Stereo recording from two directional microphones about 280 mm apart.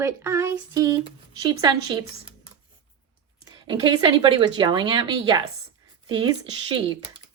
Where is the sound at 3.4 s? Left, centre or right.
Centre.